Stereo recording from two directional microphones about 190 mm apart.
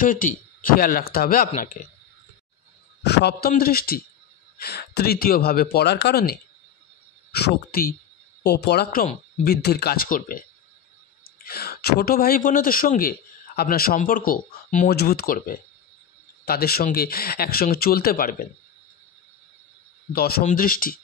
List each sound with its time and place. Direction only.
0.0 s speech: 45° left (ahead or behind)
3.0 s speech: 60° left (ahead or behind)
11.4 s speech: 55° left (ahead or behind)
20.1 s speech: 55° left (ahead or behind)